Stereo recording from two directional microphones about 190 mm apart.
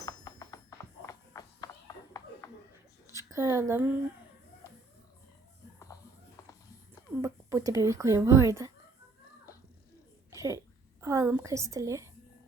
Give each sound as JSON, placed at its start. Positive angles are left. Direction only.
{"t": 0.0, "sound": "music", "side_deg": 20}
{"t": 1.0, "sound": "a sound", "side_deg": 15}
{"t": 3.1, "sound": "speech", "side_deg": -15}
{"t": 7.1, "sound": "speech", "side_deg": -15}
{"t": 10.3, "sound": "a sound", "side_deg": -15}
{"t": 11.0, "sound": "a woman's voice", "side_deg": -15}